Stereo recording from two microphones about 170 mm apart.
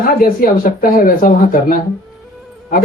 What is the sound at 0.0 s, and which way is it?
A man's voice, 60° left (ahead or behind).